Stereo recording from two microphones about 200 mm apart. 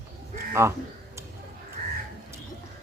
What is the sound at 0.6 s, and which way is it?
Speech, 15° right (ahead or behind).